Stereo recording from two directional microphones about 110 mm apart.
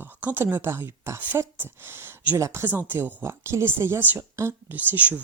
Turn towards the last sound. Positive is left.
turn(degrees=-15)  # may be behind; listen again after turning